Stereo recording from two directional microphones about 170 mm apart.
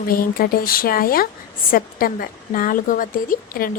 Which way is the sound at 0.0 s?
55° left (ahead or behind).